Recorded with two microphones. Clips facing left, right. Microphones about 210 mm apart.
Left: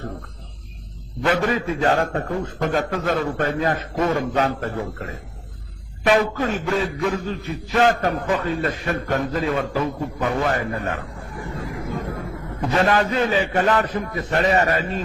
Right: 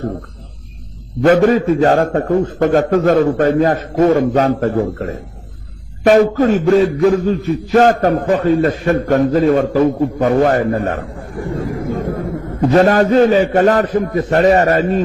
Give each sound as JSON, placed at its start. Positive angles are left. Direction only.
{"t": 1.2, "sound": "a man's voice", "side_deg": -45}
{"t": 4.6, "sound": "a man's voice", "side_deg": -50}